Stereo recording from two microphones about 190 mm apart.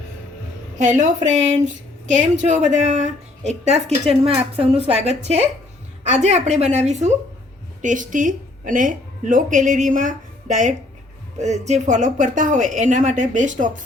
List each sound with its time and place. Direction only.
0.8 s speech: 40° right (ahead or behind)
2.1 s a woman's voice: 35° right (ahead or behind)